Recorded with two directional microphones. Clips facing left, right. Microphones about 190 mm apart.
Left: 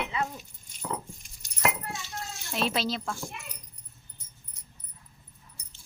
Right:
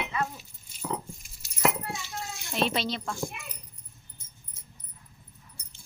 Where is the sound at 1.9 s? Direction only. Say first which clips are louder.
Right 1 dB; 10° right (ahead or behind).